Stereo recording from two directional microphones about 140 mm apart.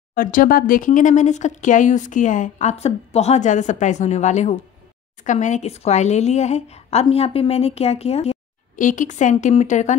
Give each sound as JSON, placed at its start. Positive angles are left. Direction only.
{"t": 0.1, "sound": "speech", "side_deg": 85}
{"t": 8.7, "sound": "speech", "side_deg": 65}